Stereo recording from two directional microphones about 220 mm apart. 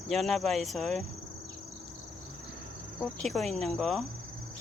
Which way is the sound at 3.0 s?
Centre (ahead or behind).